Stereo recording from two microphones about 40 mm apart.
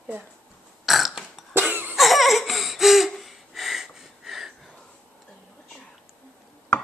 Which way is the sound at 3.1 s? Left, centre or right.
Centre.